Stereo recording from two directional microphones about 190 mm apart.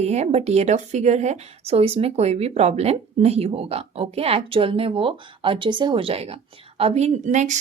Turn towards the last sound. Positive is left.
turn(degrees=-40)  # may be behind; listen again after turning